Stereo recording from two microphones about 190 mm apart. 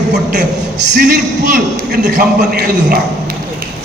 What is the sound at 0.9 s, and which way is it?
A man's voice, 55° right (ahead or behind).